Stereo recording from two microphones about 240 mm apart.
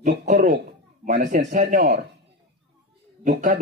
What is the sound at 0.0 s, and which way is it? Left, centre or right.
Speech, right.